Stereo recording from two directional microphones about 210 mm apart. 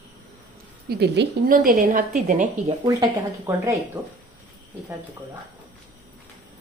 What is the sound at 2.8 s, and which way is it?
A woman's voice, 15° right (ahead or behind).